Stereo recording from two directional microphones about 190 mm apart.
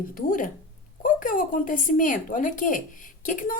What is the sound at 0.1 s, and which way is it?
Speech, 45° left (ahead or behind).